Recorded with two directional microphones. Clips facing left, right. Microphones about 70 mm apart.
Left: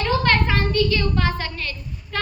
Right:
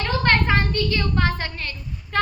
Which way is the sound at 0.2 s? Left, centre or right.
Right.